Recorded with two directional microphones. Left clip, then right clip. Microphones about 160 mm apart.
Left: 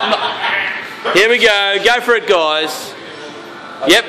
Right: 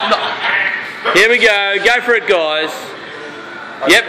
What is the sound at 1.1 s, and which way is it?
Speech, 10° left (ahead or behind).